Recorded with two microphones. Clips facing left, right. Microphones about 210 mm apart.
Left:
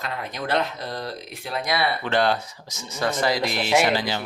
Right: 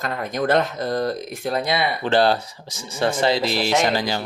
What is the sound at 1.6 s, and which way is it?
Speech, 20° right (ahead or behind).